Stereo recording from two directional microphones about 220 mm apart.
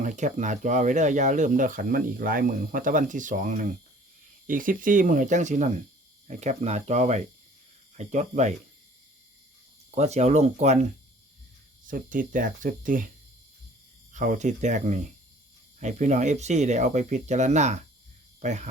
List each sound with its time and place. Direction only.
0.0 s speech: 35° right (ahead or behind)
9.9 s speech: 30° right (ahead or behind)
11.9 s speech: 35° right (ahead or behind)
14.1 s speech: 35° right (ahead or behind)